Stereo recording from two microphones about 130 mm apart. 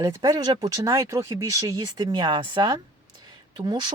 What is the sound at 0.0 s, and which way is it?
Speech, 30° right (ahead or behind).